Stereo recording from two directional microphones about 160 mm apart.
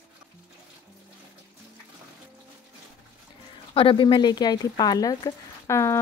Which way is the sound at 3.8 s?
30° left (ahead or behind).